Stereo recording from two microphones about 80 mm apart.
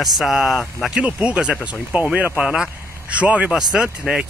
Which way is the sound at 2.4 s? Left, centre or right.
Centre.